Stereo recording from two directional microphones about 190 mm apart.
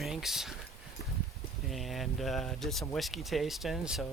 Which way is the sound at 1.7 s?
Centre (ahead or behind).